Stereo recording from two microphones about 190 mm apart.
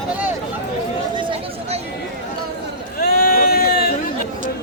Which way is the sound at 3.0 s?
50° left (ahead or behind).